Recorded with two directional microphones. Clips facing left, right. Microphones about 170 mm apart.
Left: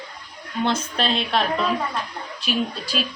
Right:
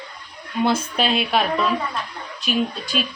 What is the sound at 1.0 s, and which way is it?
Speech, 10° right (ahead or behind).